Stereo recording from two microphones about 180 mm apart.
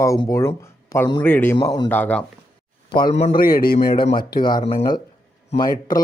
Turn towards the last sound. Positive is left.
turn(degrees=20)  # may be behind; listen again after turning